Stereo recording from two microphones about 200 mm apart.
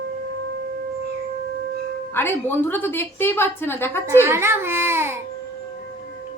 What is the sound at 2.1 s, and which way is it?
A woman's voice, 10° left (ahead or behind).